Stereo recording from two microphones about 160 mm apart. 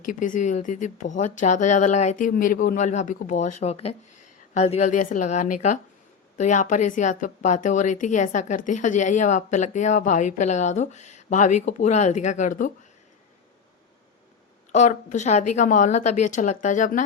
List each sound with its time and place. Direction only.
0.1 s a woman's voice: 55° left (ahead or behind)
14.7 s a woman's voice: 50° left (ahead or behind)